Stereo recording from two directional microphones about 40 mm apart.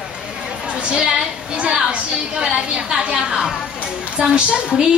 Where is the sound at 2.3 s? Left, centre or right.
Centre.